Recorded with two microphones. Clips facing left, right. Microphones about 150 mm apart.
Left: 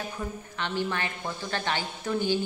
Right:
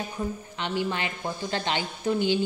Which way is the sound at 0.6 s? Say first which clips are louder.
Right 1 dB; 15° right (ahead or behind).